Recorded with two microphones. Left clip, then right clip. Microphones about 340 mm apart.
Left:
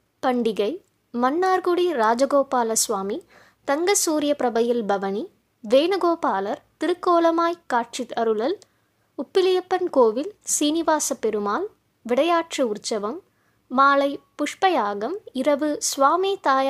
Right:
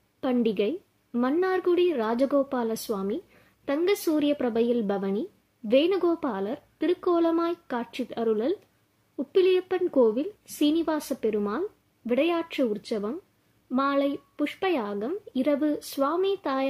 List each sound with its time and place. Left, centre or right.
0.2 s a woman's voice: left